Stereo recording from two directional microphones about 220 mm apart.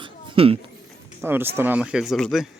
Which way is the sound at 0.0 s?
25° right (ahead or behind).